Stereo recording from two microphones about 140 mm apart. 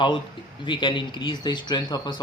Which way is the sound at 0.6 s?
35° left (ahead or behind).